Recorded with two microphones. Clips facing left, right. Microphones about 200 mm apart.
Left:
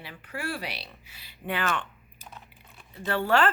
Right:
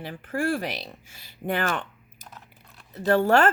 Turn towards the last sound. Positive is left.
turn(degrees=-45)  # may be behind; listen again after turning